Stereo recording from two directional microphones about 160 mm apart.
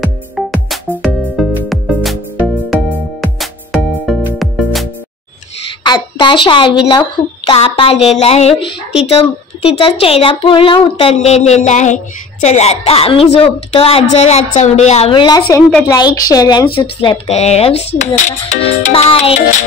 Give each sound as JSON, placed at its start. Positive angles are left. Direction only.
{"t": 0.0, "sound": "music", "side_deg": 0}
{"t": 2.5, "sound": "music", "side_deg": 0}
{"t": 5.9, "sound": "a woman's voice", "side_deg": 30}